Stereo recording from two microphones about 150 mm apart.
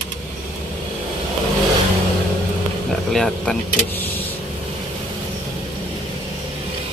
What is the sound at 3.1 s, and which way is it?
Speech, centre (ahead or behind).